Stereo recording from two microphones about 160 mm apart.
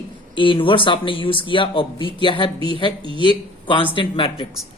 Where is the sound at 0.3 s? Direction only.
30° left (ahead or behind).